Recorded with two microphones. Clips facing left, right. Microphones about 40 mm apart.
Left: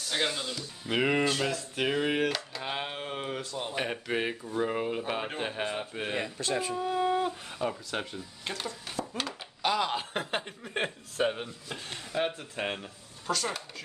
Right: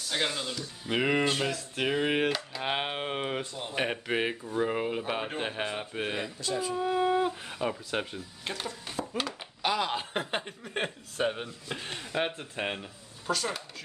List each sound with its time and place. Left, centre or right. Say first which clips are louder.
0.1 s speech: even; centre
2.0 s speech: right 1 dB; centre
2.6 s speech: right 4 dB; right
3.7 s speech: right 3 dB; centre
6.4 s speech: left 1 dB; left
6.7 s speech: right 3 dB; centre
11.9 s speech: left 1 dB; right
12.5 s speech: even; centre